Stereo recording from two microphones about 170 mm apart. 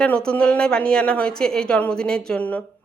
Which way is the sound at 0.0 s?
5° left (ahead or behind).